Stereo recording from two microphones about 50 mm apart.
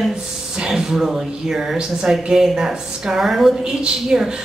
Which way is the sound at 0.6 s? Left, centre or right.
Centre.